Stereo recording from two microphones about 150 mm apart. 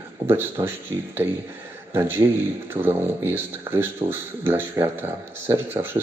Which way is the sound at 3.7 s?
15° right (ahead or behind).